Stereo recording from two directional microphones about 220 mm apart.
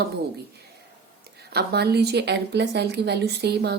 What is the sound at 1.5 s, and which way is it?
Speech, 45° right (ahead or behind).